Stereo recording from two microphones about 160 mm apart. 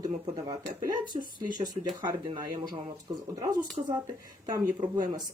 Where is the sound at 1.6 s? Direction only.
25° right (ahead or behind).